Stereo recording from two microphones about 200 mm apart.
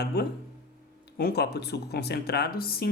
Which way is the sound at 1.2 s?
55° left (ahead or behind).